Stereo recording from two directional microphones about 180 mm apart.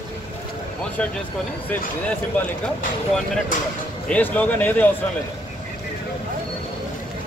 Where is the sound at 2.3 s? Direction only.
10° left (ahead or behind).